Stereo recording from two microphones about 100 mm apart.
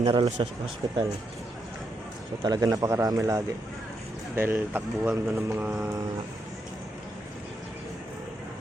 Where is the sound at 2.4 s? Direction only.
40° right (ahead or behind).